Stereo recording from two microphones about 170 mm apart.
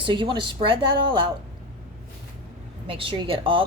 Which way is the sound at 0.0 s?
30° right (ahead or behind).